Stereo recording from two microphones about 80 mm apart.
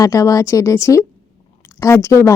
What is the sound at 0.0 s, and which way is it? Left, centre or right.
Speech, left.